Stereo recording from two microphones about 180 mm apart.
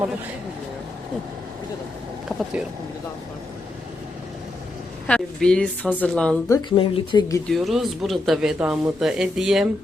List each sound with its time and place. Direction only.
5.0 s speech: 5° left (ahead or behind)
6.5 s speech: 25° left (ahead or behind)
7.5 s speech: centre (ahead or behind)